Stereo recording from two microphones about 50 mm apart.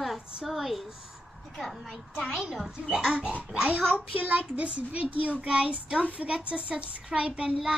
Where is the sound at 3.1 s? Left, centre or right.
Right.